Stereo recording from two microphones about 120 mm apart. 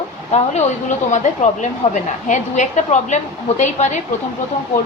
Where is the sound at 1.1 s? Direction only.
85° left.